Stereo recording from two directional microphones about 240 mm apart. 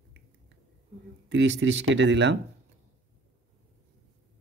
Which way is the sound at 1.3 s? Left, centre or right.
Right.